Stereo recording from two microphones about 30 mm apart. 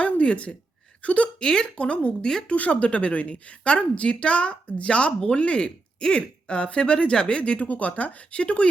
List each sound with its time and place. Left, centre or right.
0.0 s a sound: left
1.0 s speech: left
1.4 s a woman's voice: left
1.8 s a woman's voice: left
7.7 s speech: left